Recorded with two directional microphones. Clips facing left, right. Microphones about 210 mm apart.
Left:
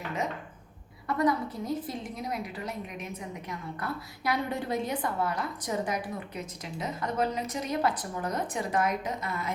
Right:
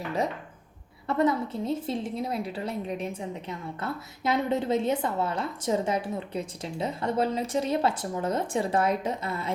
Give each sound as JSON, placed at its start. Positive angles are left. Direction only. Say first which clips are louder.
{"t": 1.0, "sound": "a woman's voice", "louder": "right 2 dB", "side_deg": -25}